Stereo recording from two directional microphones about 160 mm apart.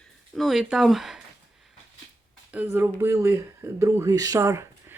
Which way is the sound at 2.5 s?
10° right (ahead or behind).